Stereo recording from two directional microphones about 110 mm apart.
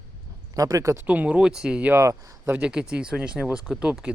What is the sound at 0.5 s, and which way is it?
Speech, 30° right (ahead or behind).